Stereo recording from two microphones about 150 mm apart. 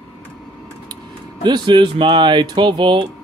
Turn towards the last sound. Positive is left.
turn(degrees=-30)  # may be behind; listen again after turning